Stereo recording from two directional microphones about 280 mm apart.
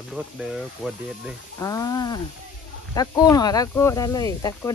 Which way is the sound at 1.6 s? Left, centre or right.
Centre.